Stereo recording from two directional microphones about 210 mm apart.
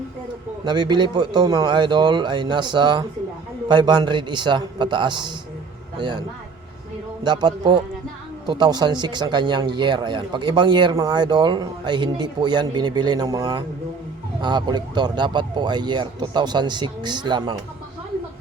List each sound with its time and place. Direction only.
0.6 s speech: 20° right (ahead or behind)
7.3 s speech: 20° right (ahead or behind)